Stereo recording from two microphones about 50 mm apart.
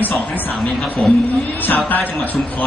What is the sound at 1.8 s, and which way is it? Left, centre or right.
Speech, left.